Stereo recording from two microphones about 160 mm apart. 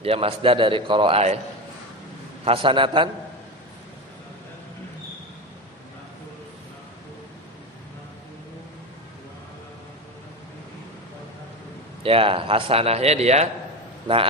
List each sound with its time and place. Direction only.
0.0 s speech: 35° right (ahead or behind)
2.4 s speech: 35° right (ahead or behind)
12.0 s speech: 35° right (ahead or behind)